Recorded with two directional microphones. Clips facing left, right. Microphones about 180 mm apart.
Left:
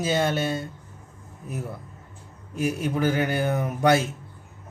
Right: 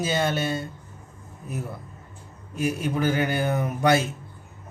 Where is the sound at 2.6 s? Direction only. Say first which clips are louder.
Even; 45° left (ahead or behind).